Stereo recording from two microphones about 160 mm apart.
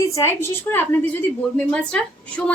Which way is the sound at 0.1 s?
15° left (ahead or behind).